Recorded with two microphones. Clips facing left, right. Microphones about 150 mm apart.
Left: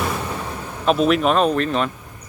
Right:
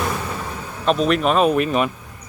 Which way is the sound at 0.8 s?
Centre (ahead or behind).